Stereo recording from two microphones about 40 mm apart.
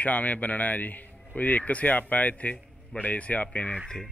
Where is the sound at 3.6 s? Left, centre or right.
Left.